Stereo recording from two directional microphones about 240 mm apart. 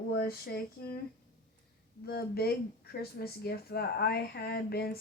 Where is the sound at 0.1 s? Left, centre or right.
Left.